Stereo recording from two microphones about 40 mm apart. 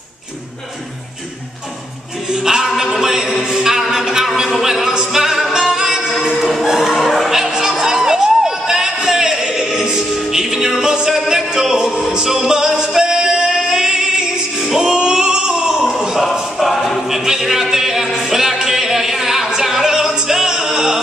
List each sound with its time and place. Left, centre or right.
2.3 s a capella: centre
4.0 s music: centre
6.3 s music: centre
6.6 s music: centre
7.6 s a sound: centre
10.8 s yodeling: centre
11.5 s music: centre
15.0 s a sound: centre
16.2 s music: centre
17.1 s a sound: centre
20.2 s music: centre